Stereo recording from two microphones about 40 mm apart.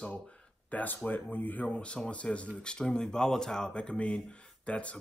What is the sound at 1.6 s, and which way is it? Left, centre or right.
Speech, left.